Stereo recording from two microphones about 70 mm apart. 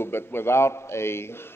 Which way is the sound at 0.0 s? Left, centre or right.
Left.